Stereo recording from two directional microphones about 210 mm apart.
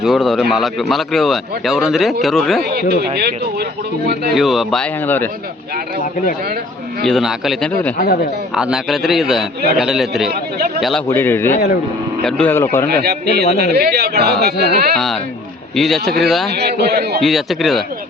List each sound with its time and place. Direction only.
0.0 s a man's voice: centre (ahead or behind)
3.2 s speech: 50° right (ahead or behind)
4.4 s a man's voice: centre (ahead or behind)
7.0 s a man's voice: centre (ahead or behind)
7.9 s speech: 45° left (ahead or behind)
8.5 s a man's voice: centre (ahead or behind)
11.1 s a man's voice: 10° left (ahead or behind)
13.0 s speech: 50° right (ahead or behind)
14.9 s a man's voice: centre (ahead or behind)
16.5 s speech: 50° right (ahead or behind)
17.2 s a man's voice: centre (ahead or behind)